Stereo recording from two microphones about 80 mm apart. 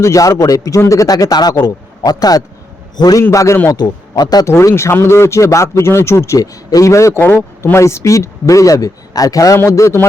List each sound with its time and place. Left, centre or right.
0.0 s a man's voice: left
3.3 s speech: left
3.7 s speech: left
4.4 s speech: left